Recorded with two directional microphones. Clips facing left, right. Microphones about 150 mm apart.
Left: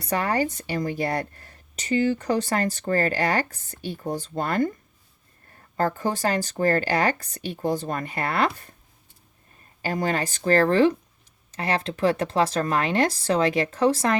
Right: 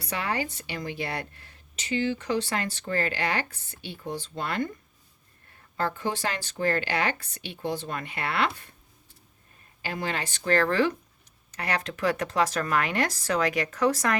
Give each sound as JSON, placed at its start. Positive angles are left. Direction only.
{"t": 0.0, "sound": "speech", "side_deg": 45}
{"t": 5.7, "sound": "speech", "side_deg": 40}
{"t": 9.8, "sound": "speech", "side_deg": 40}